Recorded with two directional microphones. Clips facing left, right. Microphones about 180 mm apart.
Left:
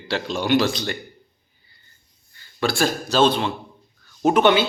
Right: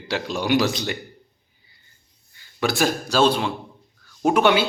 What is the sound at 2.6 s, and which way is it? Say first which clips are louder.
A man's voice: even; 15° right (ahead or behind).